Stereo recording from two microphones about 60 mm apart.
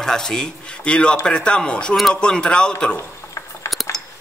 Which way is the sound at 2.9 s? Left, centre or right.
Left.